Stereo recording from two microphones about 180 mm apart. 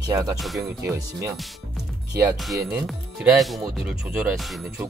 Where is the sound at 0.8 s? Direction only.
15° right (ahead or behind).